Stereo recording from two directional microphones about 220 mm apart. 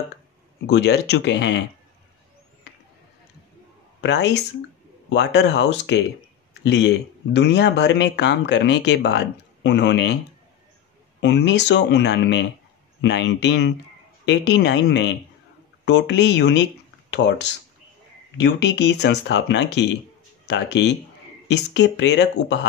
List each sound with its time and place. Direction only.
0.7 s speech: 50° left (ahead or behind)
4.0 s speech: 50° left (ahead or behind)
11.1 s speech: 50° left (ahead or behind)